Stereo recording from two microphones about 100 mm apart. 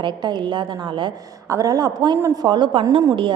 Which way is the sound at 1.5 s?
35° right (ahead or behind).